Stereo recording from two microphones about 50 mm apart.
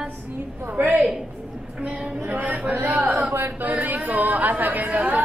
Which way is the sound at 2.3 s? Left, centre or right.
Right.